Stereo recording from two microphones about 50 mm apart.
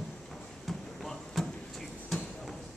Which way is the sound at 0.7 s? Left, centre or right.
Centre.